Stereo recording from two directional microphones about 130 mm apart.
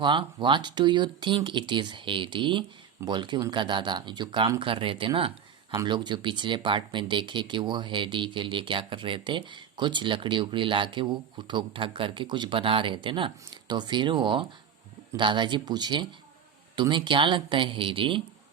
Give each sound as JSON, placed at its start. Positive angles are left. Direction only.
{"t": 0.0, "sound": "speech", "side_deg": -35}